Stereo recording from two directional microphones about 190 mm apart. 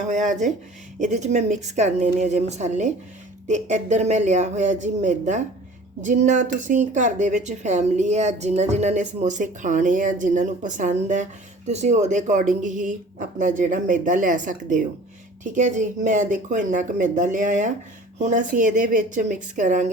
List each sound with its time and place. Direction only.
0.0 s speech: 40° right (ahead or behind)